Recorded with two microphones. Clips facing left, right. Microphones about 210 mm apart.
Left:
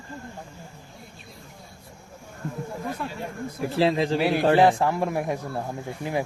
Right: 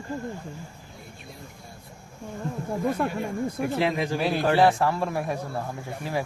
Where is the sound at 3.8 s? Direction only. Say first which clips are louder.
Left 6 dB; 30° left (ahead or behind).